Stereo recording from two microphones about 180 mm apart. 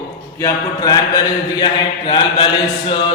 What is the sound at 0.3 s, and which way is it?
Speech, 20° left (ahead or behind).